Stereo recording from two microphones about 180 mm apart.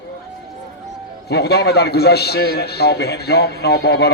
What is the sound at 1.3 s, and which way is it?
A man's voice, 65° left (ahead or behind).